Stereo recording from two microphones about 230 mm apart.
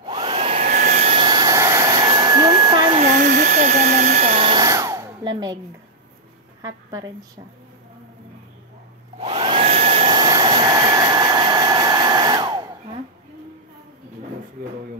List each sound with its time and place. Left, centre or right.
0.0 s hair dryer: centre
3.0 s hair dryer: right; by 5.6 s centre
6.6 s a woman's voice: centre
9.2 s hair dryer: right